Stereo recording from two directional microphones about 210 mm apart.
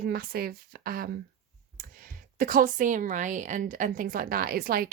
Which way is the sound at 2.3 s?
40° right (ahead or behind).